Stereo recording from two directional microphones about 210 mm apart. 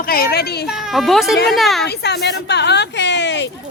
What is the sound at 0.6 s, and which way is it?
Speech, centre (ahead or behind).